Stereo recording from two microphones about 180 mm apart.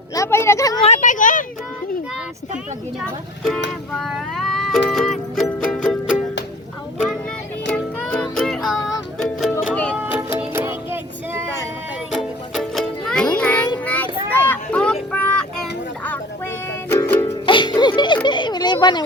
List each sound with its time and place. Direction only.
0.1 s a sound: 15° left (ahead or behind)
0.9 s a sound: 45° left (ahead or behind)
3.9 s music: centre (ahead or behind)
7.7 s music: 5° left (ahead or behind)
10.0 s music: 10° right (ahead or behind)
12.1 s music: centre (ahead or behind)
13.8 s child singing: 10° left (ahead or behind)
14.3 s a sound: 10° left (ahead or behind)
15.1 s child singing: 10° left (ahead or behind)
16.9 s music: 15° left (ahead or behind)
17.4 s music: 25° left (ahead or behind)